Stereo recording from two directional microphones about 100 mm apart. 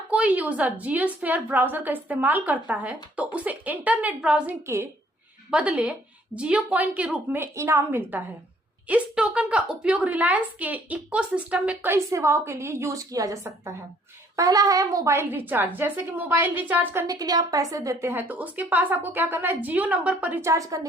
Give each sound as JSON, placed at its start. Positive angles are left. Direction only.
{"t": 0.1, "sound": "a woman's voice", "side_deg": -15}
{"t": 4.4, "sound": "a woman's voice", "side_deg": -25}
{"t": 5.5, "sound": "a woman's voice", "side_deg": -10}
{"t": 7.4, "sound": "a woman's voice", "side_deg": -30}
{"t": 11.9, "sound": "a woman's voice", "side_deg": -30}
{"t": 17.1, "sound": "a woman's voice", "side_deg": -40}
{"t": 18.1, "sound": "a woman's voice", "side_deg": -20}
{"t": 20.4, "sound": "a woman's voice", "side_deg": -35}